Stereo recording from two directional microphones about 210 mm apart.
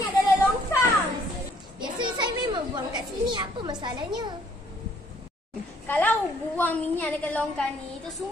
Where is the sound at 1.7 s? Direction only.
20° right (ahead or behind).